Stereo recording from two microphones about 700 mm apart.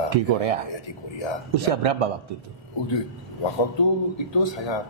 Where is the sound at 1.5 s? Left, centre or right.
Right.